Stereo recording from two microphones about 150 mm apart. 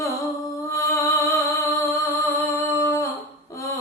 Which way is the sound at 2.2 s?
15° left (ahead or behind).